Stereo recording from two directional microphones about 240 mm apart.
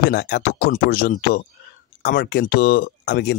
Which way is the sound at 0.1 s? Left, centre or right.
Left.